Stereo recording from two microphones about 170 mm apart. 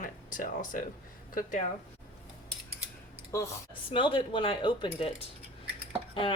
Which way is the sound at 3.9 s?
30° left (ahead or behind).